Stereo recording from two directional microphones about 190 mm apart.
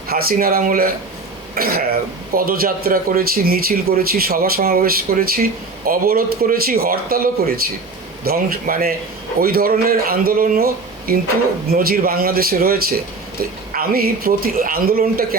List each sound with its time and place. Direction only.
0.1 s a man's voice: 50° right (ahead or behind)